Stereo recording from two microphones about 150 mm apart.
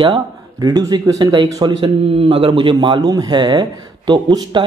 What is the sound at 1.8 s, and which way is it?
A man's voice, 40° right (ahead or behind).